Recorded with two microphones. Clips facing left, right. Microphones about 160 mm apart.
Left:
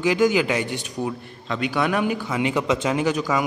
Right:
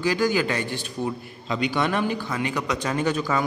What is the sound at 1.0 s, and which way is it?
Speech, centre (ahead or behind).